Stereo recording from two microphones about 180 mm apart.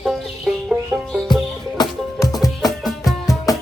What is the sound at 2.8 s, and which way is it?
Music, centre (ahead or behind).